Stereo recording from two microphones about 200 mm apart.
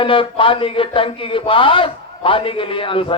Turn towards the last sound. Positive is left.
turn(degrees=25)  # may be behind; listen again after turning